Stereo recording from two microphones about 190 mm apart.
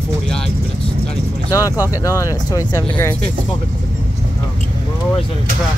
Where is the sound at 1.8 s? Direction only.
15° left (ahead or behind).